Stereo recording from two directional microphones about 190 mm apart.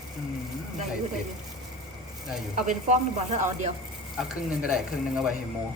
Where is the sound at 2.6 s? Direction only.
40° right (ahead or behind).